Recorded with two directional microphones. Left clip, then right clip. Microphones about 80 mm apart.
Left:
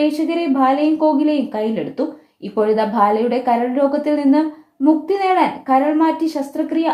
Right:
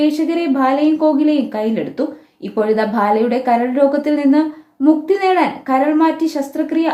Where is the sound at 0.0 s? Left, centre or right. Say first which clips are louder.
Right 2 dB; left.